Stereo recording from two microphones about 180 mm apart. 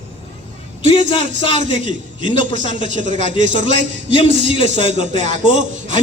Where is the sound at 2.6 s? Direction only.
30° left (ahead or behind).